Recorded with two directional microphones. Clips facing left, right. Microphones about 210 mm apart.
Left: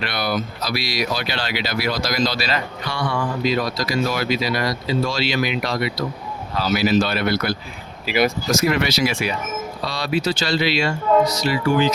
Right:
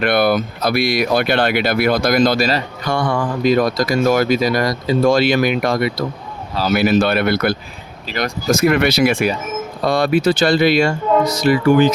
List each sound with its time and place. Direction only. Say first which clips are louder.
0.0 s speech: right 9 dB; 55° right (ahead or behind)
8.0 s speech: left 4 dB; 10° left (ahead or behind)
8.4 s speech: right 5 dB; 55° right (ahead or behind)